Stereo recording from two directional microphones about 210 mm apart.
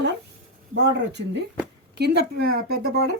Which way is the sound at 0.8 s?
55° right (ahead or behind).